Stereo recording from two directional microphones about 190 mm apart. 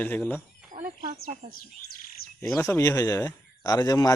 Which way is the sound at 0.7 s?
45° right (ahead or behind).